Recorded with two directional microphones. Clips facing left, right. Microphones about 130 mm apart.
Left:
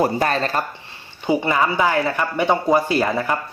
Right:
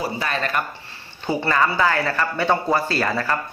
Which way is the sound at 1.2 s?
15° left (ahead or behind).